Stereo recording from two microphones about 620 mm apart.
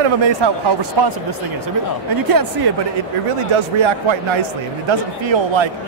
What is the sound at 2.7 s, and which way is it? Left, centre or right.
Speech, right.